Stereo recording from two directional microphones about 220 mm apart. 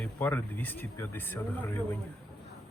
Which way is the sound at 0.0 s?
10° left (ahead or behind).